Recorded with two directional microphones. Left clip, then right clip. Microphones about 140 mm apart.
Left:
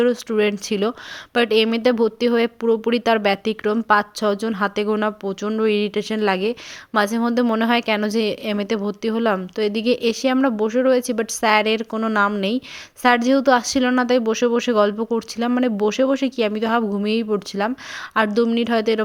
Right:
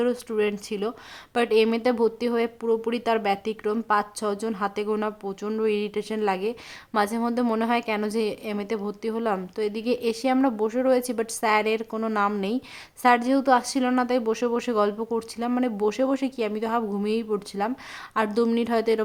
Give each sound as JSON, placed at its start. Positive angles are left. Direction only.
{"t": 0.0, "sound": "a woman's voice", "side_deg": 25}
{"t": 18.3, "sound": "a woman's voice", "side_deg": 5}
{"t": 18.5, "sound": "a woman's voice", "side_deg": 15}